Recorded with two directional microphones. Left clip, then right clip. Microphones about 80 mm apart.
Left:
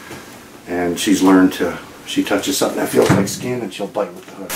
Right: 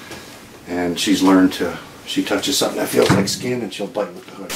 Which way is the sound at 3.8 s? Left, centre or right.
Centre.